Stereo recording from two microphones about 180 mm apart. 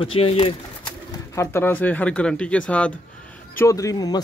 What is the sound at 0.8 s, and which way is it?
Speech, 15° left (ahead or behind).